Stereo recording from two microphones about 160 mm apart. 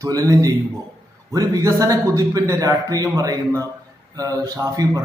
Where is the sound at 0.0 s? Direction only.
20° right (ahead or behind).